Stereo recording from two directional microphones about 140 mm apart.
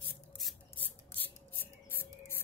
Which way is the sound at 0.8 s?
10° left (ahead or behind).